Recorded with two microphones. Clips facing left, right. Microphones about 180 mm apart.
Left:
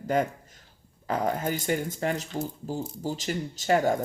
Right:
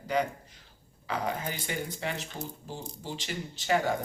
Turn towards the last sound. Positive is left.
turn(degrees=45)  # may be behind; listen again after turning